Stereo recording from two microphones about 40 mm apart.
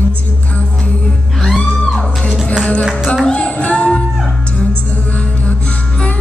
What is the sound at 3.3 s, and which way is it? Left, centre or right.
Music, left.